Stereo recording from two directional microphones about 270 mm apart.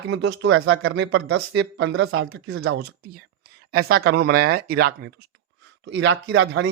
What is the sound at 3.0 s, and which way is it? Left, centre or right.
Speech, right.